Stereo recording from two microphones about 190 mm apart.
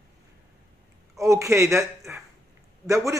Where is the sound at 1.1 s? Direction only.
15° right (ahead or behind).